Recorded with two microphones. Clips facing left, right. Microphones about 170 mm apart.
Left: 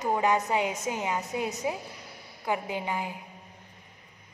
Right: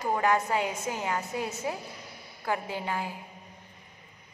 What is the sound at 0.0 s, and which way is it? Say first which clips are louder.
A woman's voice: left 1 dB; 20° left (ahead or behind).